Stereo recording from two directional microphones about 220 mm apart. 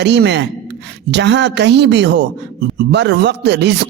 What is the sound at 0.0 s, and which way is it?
A man's voice, 50° right (ahead or behind).